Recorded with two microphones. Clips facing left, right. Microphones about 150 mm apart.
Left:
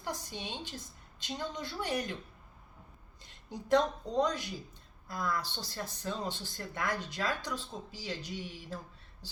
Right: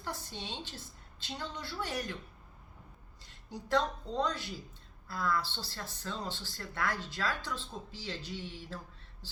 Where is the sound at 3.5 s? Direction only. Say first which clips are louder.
Left 3 dB; 20° left (ahead or behind).